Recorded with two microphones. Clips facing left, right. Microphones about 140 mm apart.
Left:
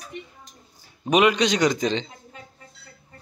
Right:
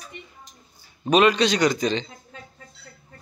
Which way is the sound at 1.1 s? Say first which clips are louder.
Right 1 dB; 15° left (ahead or behind).